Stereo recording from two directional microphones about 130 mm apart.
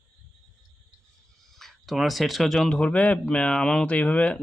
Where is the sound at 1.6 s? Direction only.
Centre (ahead or behind).